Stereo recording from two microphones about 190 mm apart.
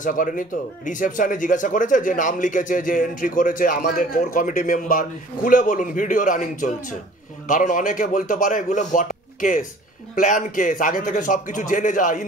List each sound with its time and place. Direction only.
0.0 s speech: 45° left (ahead or behind)